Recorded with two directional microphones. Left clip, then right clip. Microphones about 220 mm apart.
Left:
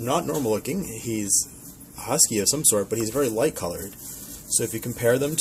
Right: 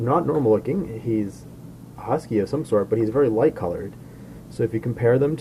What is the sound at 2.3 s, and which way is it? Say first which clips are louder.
Speech: right 1 dB; 35° left (ahead or behind).